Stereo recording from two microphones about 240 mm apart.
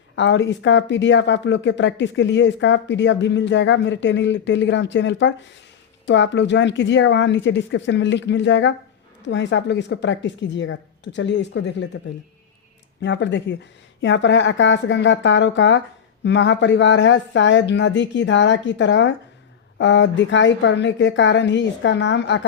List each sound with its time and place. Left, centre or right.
0.2 s speech: left
13.0 s speech: left